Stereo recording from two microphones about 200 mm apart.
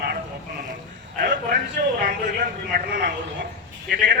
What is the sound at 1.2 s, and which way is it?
Speech, 50° right (ahead or behind).